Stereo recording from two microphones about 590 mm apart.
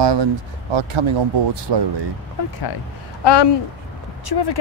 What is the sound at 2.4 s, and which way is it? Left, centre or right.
Speech, left.